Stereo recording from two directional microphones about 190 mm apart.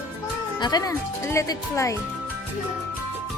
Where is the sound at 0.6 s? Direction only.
20° left (ahead or behind).